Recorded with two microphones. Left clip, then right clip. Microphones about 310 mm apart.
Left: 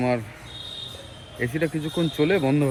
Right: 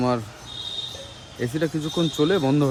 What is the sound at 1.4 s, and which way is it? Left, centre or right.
Speech, centre.